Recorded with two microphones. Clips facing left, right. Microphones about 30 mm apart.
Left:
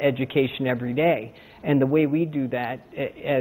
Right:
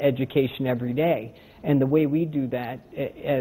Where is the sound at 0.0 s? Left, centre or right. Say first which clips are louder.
Even; centre.